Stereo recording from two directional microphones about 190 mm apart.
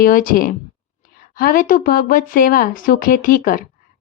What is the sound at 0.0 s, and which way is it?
A woman's voice, 45° left (ahead or behind).